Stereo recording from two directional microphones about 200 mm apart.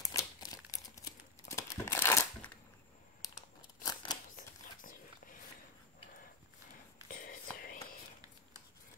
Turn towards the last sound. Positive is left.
turn(degrees=45)  # may be behind; listen again after turning